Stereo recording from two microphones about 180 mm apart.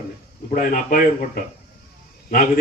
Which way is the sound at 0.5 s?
50° left (ahead or behind).